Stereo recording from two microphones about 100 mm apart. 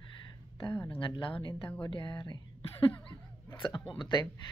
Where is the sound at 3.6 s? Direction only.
50° left (ahead or behind).